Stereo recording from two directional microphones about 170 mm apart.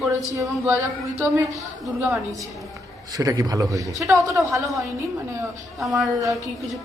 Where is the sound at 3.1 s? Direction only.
20° right (ahead or behind).